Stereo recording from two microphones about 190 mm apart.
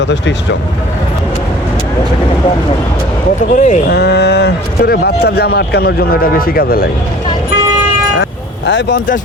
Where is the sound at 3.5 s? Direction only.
40° left (ahead or behind).